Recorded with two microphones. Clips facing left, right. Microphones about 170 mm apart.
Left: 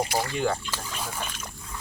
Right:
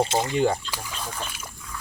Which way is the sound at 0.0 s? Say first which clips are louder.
Right 4 dB; 20° right (ahead or behind).